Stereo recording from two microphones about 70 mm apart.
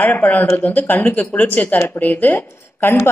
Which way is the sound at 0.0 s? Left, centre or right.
Left.